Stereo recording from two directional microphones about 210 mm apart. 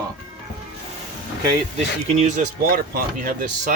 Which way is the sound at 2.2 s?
40° right (ahead or behind).